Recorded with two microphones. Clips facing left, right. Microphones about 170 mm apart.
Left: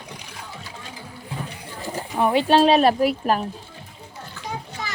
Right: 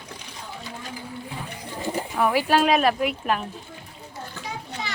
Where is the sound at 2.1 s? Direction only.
25° left (ahead or behind).